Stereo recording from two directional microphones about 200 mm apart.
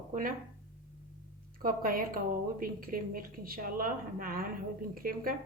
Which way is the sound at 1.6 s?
45° right (ahead or behind).